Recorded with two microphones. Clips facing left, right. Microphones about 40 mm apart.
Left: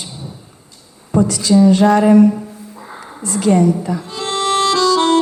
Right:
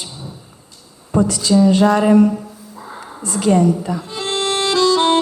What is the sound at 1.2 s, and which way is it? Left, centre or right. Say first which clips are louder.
Speech: left 2 dB; right.